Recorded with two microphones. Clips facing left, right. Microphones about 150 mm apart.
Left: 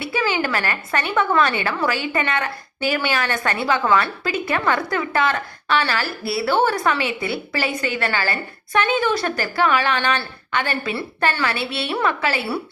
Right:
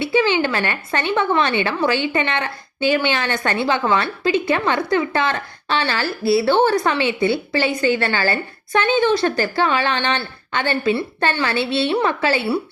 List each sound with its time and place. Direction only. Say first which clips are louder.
0.0 s a woman's voice: right 5 dB; 25° right (ahead or behind)